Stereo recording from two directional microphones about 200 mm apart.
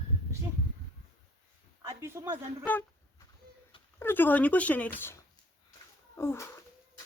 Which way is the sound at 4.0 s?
10° left (ahead or behind).